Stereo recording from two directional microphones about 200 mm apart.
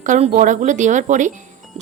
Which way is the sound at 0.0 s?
40° right (ahead or behind).